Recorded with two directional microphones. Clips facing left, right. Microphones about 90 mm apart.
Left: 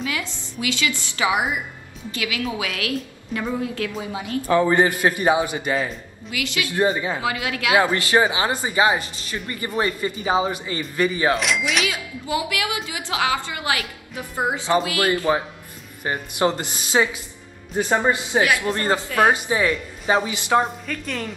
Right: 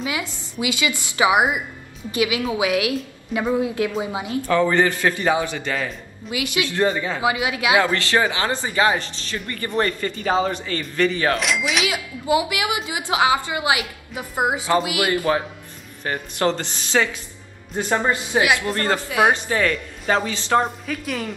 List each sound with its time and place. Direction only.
0.0 s a woman's voice: 20° right (ahead or behind)
4.5 s speech: 20° left (ahead or behind)
6.3 s a woman's voice: 20° right (ahead or behind)
6.7 s speech: 15° left (ahead or behind)
7.2 s a woman's voice: 20° right (ahead or behind)
7.8 s speech: 15° left (ahead or behind)
11.3 s a woman's voice: centre (ahead or behind)
12.3 s a woman's voice: 20° right (ahead or behind)
15.3 s speech: 15° left (ahead or behind)
19.0 s a woman's voice: 10° right (ahead or behind)
19.3 s speech: 15° left (ahead or behind)
20.6 s a woman's voice: 5° right (ahead or behind)